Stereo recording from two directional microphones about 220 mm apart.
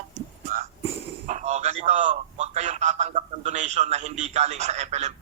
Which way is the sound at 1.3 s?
30° right (ahead or behind).